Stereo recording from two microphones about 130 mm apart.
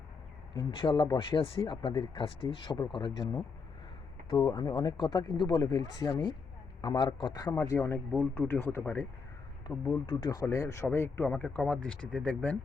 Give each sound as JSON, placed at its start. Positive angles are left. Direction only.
{"t": 0.5, "sound": "speech", "side_deg": 40}
{"t": 4.4, "sound": "speech", "side_deg": 35}
{"t": 7.7, "sound": "speech", "side_deg": 20}
{"t": 9.7, "sound": "speech", "side_deg": 35}
{"t": 11.3, "sound": "speech", "side_deg": 5}